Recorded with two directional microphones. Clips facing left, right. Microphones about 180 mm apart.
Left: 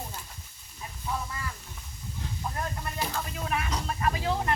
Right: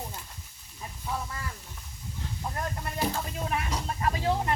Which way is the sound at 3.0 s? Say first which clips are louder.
Right 3 dB; 30° right (ahead or behind).